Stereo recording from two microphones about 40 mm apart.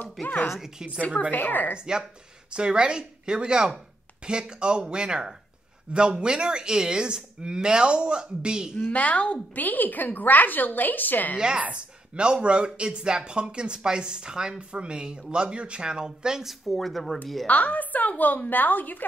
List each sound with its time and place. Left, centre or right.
0.0 s a woman's voice: left
2.5 s speech: right
8.9 s speech: left
9.6 s a woman's voice: left
11.3 s speech: centre
16.4 s speech: centre
17.5 s a woman's voice: left